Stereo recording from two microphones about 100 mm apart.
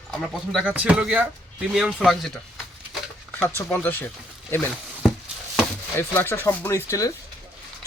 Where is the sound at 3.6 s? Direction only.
20° left (ahead or behind).